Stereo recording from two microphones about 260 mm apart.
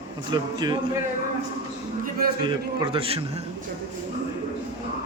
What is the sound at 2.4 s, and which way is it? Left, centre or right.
Speech, centre.